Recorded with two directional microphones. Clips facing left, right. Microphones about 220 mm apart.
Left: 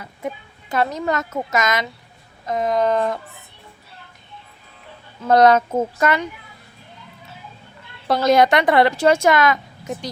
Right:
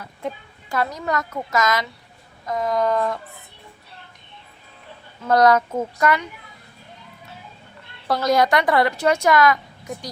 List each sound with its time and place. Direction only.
0.0 s a woman's voice: 10° left (ahead or behind)
0.7 s a woman's voice: 25° left (ahead or behind)
5.3 s a woman's voice: 25° left (ahead or behind)
8.0 s a woman's voice: 25° left (ahead or behind)